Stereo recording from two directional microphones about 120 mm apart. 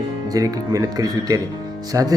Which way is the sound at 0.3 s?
30° right (ahead or behind).